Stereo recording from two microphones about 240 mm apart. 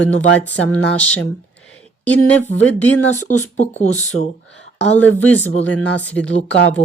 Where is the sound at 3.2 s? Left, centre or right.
Left.